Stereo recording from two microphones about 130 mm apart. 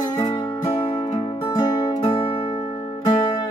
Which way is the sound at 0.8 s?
35° left (ahead or behind).